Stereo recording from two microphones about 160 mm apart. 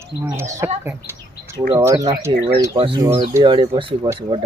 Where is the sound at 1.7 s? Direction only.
20° right (ahead or behind).